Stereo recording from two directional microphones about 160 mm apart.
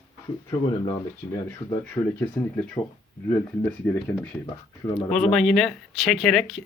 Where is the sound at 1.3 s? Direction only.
15° left (ahead or behind).